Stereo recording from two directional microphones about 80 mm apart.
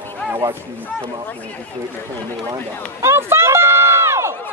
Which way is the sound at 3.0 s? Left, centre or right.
Right.